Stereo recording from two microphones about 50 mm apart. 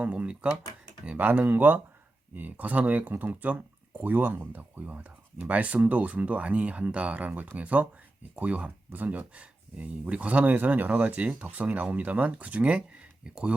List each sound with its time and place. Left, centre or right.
0.0 s speech: right
1.1 s speech: right
11.1 s speech: right